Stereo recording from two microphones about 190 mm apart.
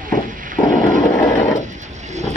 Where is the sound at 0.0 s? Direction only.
45° right (ahead or behind).